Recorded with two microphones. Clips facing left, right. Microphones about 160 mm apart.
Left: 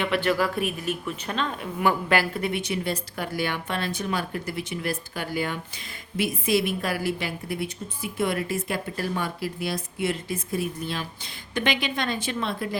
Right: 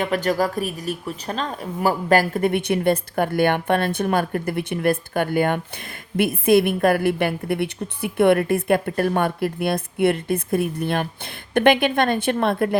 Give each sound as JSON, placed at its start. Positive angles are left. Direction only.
{"t": 0.0, "sound": "speech", "side_deg": -40}